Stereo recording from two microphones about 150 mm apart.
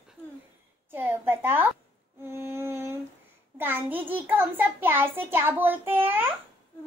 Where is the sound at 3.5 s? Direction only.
15° right (ahead or behind).